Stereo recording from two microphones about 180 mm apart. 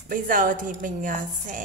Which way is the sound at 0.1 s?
50° right (ahead or behind).